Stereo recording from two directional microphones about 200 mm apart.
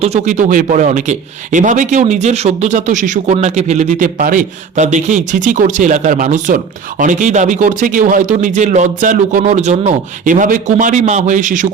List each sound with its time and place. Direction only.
0.0 s speech: 35° right (ahead or behind)